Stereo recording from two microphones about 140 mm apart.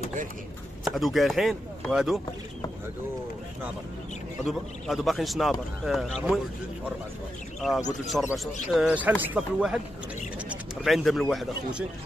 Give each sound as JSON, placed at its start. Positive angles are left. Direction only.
{"t": 0.8, "sound": "speech", "side_deg": 0}
{"t": 4.5, "sound": "speech", "side_deg": 0}
{"t": 8.1, "sound": "speech", "side_deg": 0}
{"t": 8.7, "sound": "speech", "side_deg": -10}